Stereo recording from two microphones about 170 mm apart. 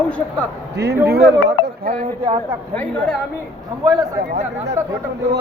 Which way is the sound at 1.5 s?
75° right (ahead or behind).